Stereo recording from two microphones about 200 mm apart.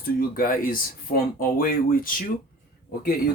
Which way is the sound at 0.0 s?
45° left (ahead or behind).